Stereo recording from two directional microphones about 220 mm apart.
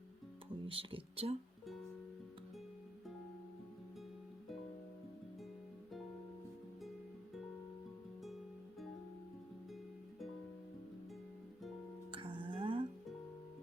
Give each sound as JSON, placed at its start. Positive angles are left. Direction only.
{"t": 0.6, "sound": "speech", "side_deg": -25}
{"t": 12.1, "sound": "music", "side_deg": -25}